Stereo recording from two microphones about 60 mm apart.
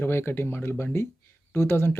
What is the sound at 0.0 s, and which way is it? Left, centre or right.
Speech, left.